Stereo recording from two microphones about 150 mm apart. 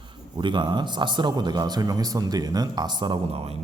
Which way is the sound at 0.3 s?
30° right (ahead or behind).